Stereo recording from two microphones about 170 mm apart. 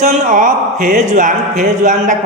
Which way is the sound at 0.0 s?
45° right (ahead or behind).